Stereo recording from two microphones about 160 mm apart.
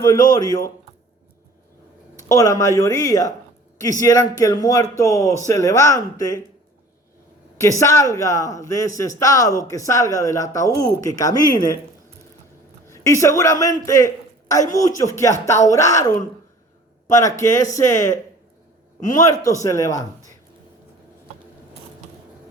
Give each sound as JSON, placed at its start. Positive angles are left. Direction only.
{"t": 0.3, "sound": "a man's voice", "side_deg": 20}
{"t": 2.1, "sound": "a man's voice", "side_deg": 20}
{"t": 7.6, "sound": "a man's voice", "side_deg": 20}
{"t": 12.9, "sound": "a man's voice", "side_deg": 20}
{"t": 17.2, "sound": "a man's voice", "side_deg": 20}
{"t": 18.9, "sound": "a man's voice", "side_deg": 55}
{"t": 19.3, "sound": "a man's voice", "side_deg": 20}